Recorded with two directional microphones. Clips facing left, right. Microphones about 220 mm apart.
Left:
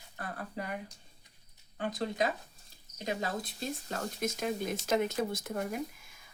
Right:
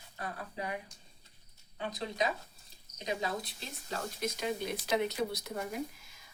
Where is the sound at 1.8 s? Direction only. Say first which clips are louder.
Left 3 dB; 50° left (ahead or behind).